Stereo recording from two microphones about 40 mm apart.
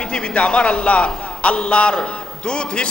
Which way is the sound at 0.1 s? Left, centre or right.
Left.